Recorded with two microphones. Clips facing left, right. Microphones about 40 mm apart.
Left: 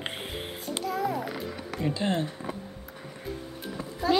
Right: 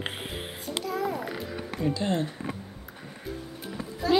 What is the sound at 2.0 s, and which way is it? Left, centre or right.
Speech, centre.